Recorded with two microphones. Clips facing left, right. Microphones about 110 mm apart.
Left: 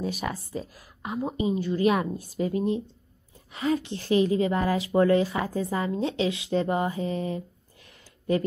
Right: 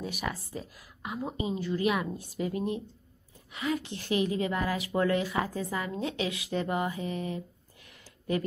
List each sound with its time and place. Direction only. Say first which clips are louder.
0.0 s a woman's voice: left 4 dB; 30° left (ahead or behind)